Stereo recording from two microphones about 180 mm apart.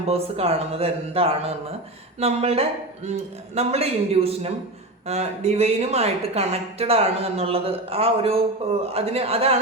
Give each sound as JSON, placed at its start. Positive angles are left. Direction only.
{"t": 0.1, "sound": "a woman's voice", "side_deg": -35}